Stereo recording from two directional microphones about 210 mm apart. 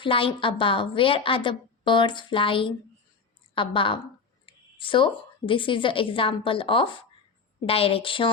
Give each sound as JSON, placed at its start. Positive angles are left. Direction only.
{"t": 0.0, "sound": "a woman's voice", "side_deg": 25}